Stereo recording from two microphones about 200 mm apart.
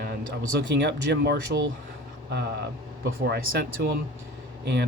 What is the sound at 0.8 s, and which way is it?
Speech, 60° right (ahead or behind).